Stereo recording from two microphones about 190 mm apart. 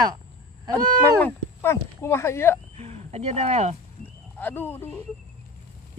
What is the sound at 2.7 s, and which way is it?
Speech, 35° right (ahead or behind).